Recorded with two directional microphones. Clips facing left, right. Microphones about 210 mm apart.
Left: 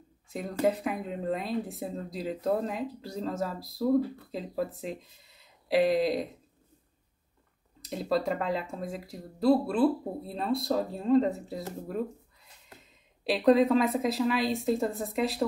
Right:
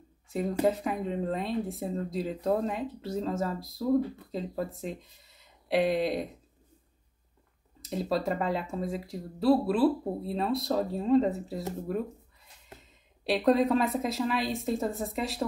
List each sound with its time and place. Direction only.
0.3 s speech: centre (ahead or behind)
7.8 s speech: centre (ahead or behind)
13.2 s speech: centre (ahead or behind)